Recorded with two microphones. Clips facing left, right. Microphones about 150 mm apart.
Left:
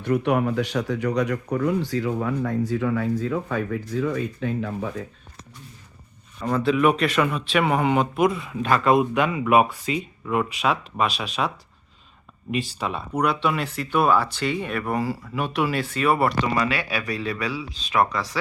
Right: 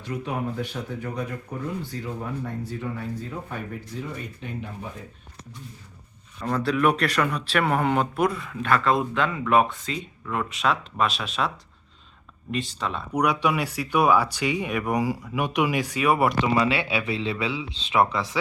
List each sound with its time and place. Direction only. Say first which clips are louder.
0.0 s speech: left 8 dB; 65° left (ahead or behind); by 4.2 s 90° left
6.4 s speech: left 3 dB; centre (ahead or behind)
8.4 s speech: left 3 dB; 15° left (ahead or behind)
13.1 s speech: even; 10° right (ahead or behind)